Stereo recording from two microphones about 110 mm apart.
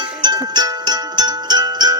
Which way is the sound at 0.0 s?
40° right (ahead or behind).